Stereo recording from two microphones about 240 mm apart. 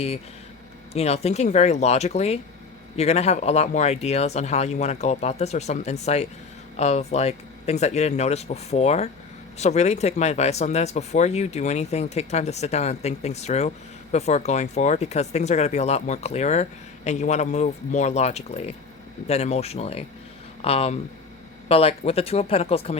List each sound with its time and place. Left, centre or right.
0.9 s speech: left